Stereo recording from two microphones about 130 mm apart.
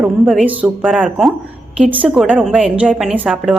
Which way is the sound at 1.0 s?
Centre (ahead or behind).